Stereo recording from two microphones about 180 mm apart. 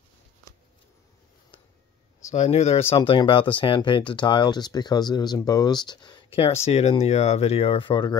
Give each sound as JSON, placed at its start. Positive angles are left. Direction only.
{"t": 2.2, "sound": "speech", "side_deg": 40}